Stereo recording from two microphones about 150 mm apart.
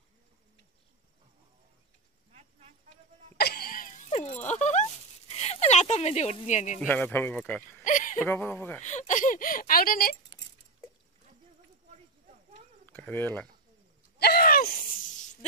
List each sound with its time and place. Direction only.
3.3 s cough: 90° left
4.0 s a sound: 45° left (ahead or behind)
6.9 s speech: 10° left (ahead or behind)
7.8 s a sound: 60° left (ahead or behind)
8.3 s speech: 15° left (ahead or behind)
8.8 s speech: 55° left (ahead or behind); by 10.1 s 75° left (ahead or behind)
12.8 s speech: 10° left (ahead or behind)
14.1 s a sound: 90° left
14.9 s snake: 60° left (ahead or behind)